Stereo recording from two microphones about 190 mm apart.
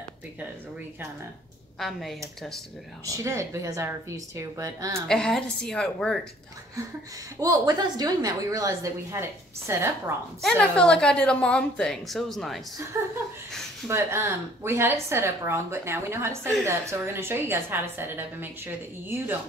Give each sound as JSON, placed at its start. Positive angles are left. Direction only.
{"t": 1.8, "sound": "a woman's voice", "side_deg": 0}
{"t": 3.1, "sound": "a woman's voice", "side_deg": -15}
{"t": 5.0, "sound": "a woman's voice", "side_deg": 5}
{"t": 7.3, "sound": "a woman's voice", "side_deg": -20}
{"t": 10.6, "sound": "a woman's voice", "side_deg": 5}
{"t": 12.9, "sound": "a woman's voice", "side_deg": -15}